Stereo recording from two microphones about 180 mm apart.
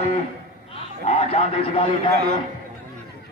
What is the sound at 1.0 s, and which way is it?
Speech, 35° left (ahead or behind).